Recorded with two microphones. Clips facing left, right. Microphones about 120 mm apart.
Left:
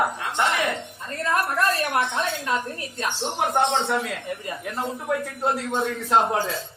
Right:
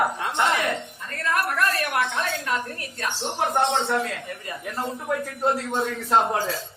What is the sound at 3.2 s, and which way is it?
A man's voice, centre (ahead or behind).